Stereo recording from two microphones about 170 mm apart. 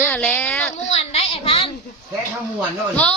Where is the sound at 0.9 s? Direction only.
40° left (ahead or behind).